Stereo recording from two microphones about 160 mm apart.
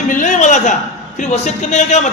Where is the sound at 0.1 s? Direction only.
55° left (ahead or behind).